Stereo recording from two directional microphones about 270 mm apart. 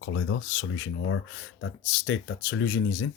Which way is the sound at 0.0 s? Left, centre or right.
Left.